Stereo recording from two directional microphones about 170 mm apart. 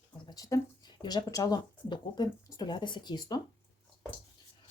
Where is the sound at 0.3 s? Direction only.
20° left (ahead or behind).